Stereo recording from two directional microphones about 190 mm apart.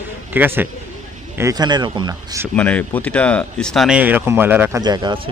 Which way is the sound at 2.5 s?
5° left (ahead or behind).